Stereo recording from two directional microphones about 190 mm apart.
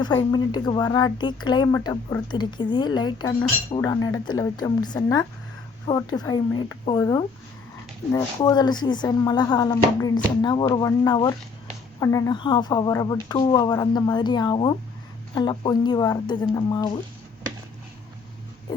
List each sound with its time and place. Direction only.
0.3 s speech: 20° left (ahead or behind)